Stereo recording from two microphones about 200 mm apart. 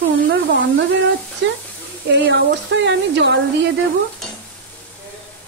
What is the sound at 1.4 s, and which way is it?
Speech, 60° right (ahead or behind).